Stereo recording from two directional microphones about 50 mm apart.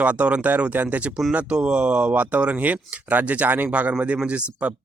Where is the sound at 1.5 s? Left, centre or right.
Right.